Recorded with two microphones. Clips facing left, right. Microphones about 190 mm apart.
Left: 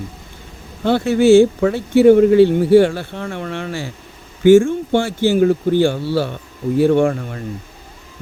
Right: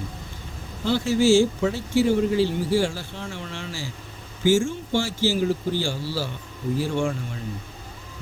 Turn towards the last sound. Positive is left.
turn(degrees=60)  # may be behind; listen again after turning